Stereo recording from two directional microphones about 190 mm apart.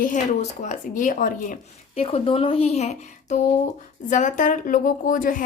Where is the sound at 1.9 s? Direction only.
30° left (ahead or behind); by 5.4 s 45° left (ahead or behind).